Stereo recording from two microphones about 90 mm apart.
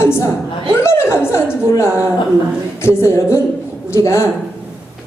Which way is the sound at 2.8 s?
30° left (ahead or behind).